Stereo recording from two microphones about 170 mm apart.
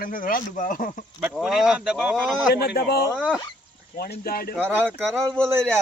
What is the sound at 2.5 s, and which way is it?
A man's voice, 70° left (ahead or behind).